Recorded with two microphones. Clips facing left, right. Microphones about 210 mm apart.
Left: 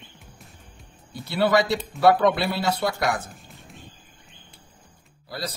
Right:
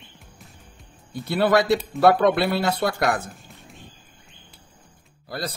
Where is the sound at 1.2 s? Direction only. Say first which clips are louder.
Right 2 dB; 50° right (ahead or behind).